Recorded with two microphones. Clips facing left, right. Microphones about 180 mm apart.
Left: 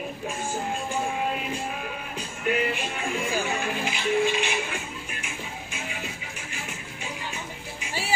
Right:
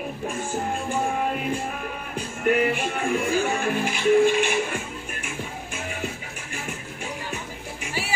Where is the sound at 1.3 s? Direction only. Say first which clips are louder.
Right 3 dB; 50° right (ahead or behind).